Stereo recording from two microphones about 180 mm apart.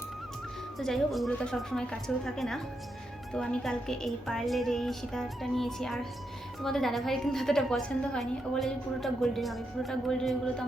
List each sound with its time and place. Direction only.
0.8 s a woman's voice: centre (ahead or behind)